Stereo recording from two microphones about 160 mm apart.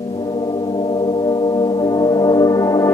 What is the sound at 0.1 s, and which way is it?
Music, 30° left (ahead or behind).